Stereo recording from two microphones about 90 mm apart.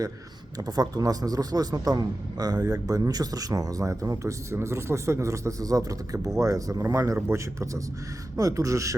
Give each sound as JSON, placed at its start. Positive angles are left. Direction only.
{"t": 0.6, "sound": "a man's voice", "side_deg": -45}